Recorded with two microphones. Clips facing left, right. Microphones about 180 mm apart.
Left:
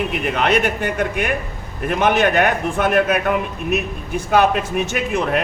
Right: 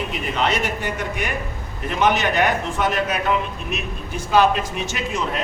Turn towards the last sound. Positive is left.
turn(degrees=60)  # may be behind; listen again after turning